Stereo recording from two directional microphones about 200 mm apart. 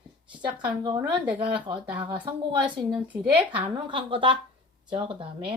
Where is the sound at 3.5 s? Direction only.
25° right (ahead or behind).